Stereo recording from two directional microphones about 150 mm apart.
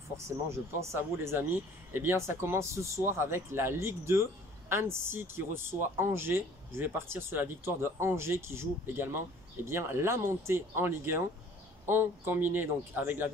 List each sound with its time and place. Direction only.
0.5 s speech: 15° right (ahead or behind)